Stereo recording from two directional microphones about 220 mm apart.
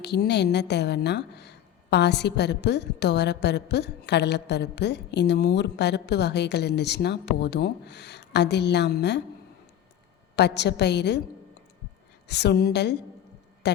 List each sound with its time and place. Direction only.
0.0 s speech: 50° left (ahead or behind)
10.3 s speech: 50° left (ahead or behind)
12.3 s speech: 50° left (ahead or behind)